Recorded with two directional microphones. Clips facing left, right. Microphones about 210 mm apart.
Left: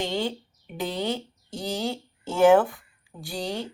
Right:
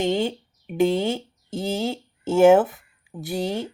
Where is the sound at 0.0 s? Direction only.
20° right (ahead or behind).